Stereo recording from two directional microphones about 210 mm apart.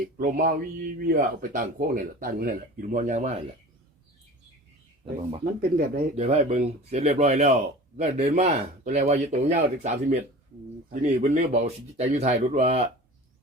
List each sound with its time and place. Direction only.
0.0 s speech: 40° right (ahead or behind)
5.5 s speech: 45° right (ahead or behind)
6.1 s speech: 30° right (ahead or behind)